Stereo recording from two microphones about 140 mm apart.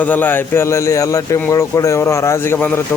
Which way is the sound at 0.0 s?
10° left (ahead or behind).